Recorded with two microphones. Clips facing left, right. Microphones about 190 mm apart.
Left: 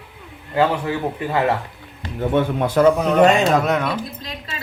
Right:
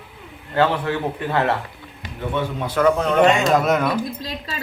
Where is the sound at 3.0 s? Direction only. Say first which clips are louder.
Left 2 dB; centre (ahead or behind).